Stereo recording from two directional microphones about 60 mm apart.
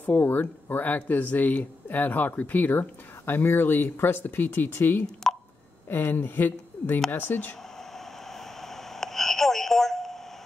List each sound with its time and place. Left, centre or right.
0.0 s speech: left
5.2 s a sound: centre
5.9 s speech: left
8.3 s telephone: centre